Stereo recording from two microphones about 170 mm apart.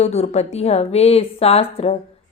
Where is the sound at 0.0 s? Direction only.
35° left (ahead or behind).